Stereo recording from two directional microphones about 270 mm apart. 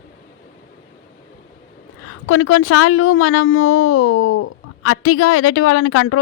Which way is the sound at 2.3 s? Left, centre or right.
Left.